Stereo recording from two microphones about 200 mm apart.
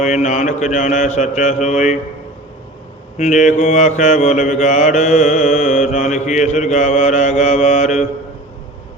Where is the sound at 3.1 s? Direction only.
35° left (ahead or behind).